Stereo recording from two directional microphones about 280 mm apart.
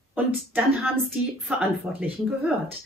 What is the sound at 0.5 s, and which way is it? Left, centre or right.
Speech, centre.